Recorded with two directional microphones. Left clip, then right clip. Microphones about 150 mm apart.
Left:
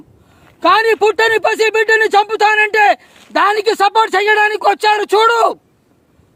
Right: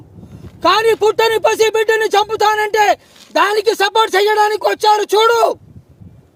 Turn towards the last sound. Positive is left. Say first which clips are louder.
# left 1 dB
turn(degrees=20)  # may be behind; listen again after turning